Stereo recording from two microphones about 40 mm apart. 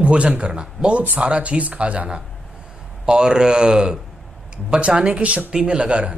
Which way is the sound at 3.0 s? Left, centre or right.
Centre.